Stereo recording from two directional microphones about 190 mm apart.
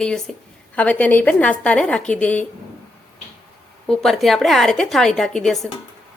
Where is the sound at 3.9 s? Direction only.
Centre (ahead or behind).